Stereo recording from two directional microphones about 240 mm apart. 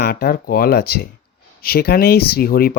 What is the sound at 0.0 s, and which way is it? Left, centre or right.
Speech, left.